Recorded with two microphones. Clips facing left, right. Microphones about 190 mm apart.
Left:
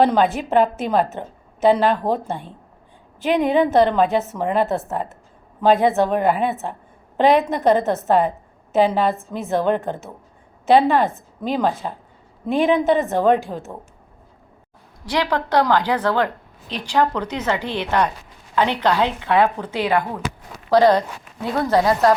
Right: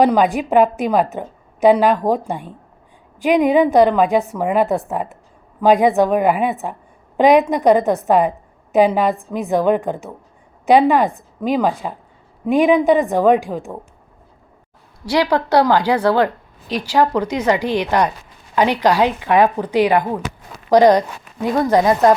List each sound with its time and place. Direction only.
0.0 s speech: 15° right (ahead or behind)
15.0 s speech: 10° right (ahead or behind)